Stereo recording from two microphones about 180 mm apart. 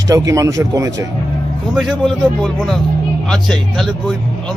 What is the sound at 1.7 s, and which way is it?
A man's voice, centre (ahead or behind).